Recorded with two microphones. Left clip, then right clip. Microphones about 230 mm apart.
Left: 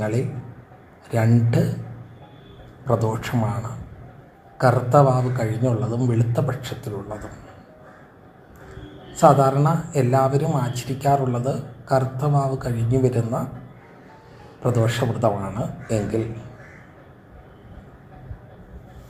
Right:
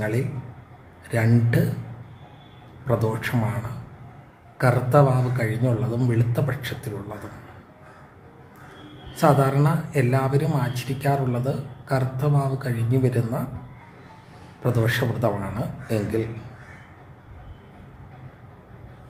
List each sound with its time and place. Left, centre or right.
0.0 s a man's voice: centre
2.8 s a man's voice: centre
4.5 s a man's voice: centre
9.1 s a man's voice: centre
14.6 s a man's voice: centre